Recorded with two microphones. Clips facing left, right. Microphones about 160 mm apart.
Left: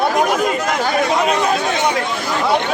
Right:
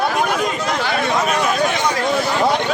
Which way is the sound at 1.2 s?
35° left (ahead or behind).